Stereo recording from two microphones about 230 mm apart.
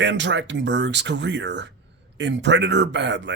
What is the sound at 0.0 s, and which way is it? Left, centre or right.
Speech, right.